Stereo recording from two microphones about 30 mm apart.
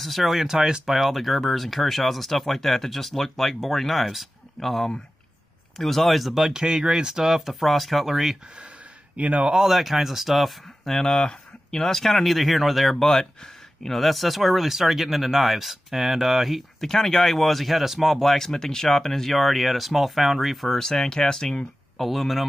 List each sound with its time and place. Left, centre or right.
0.0 s speech: centre
6.5 s speech: right; by 7.5 s centre
7.6 s speech: centre
9.1 s a man's voice: right
9.6 s speech: centre
11.1 s a sound: left
11.8 s speech: centre
13.0 s speech: centre
16.8 s speech: centre
18.6 s speech: left; by 20.5 s centre
20.6 s speech: centre
22.0 s speech: centre